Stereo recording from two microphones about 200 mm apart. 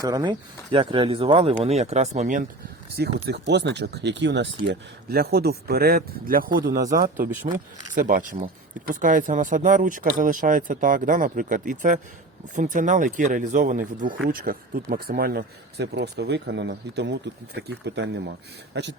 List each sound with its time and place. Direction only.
0.0 s speech: 20° right (ahead or behind); by 2.5 s 40° right (ahead or behind)
2.9 s speech: 55° right (ahead or behind)